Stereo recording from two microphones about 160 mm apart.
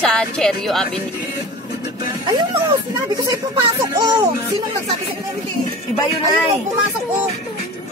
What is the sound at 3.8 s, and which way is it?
Music, 20° right (ahead or behind).